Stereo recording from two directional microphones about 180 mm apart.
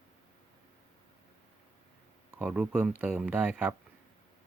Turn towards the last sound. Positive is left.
turn(degrees=-5)  # may be behind; listen again after turning